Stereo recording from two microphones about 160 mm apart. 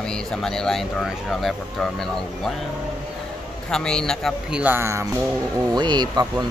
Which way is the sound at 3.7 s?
5° left (ahead or behind).